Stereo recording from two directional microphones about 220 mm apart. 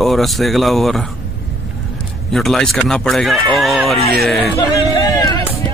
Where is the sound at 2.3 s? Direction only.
Centre (ahead or behind).